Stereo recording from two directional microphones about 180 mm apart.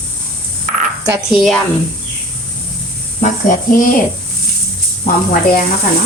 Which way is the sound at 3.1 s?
45° left (ahead or behind).